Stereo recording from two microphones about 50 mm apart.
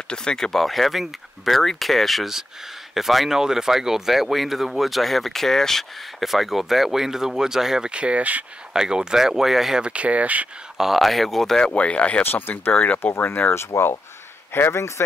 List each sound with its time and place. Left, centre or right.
0.1 s speech: centre
7.9 s speech: right
8.7 s speech: centre
9.8 s speech: right
10.8 s speech: centre
11.7 s speech: left
12.2 s speech: left
12.7 s speech: left
13.0 s speech: left
14.7 s speech: left